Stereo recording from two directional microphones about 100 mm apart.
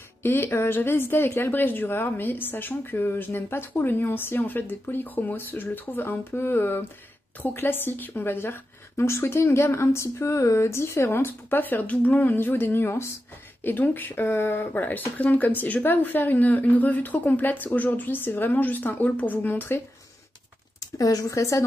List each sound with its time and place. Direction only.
0.2 s a woman's voice: 20° left (ahead or behind)
20.8 s speech: 35° left (ahead or behind)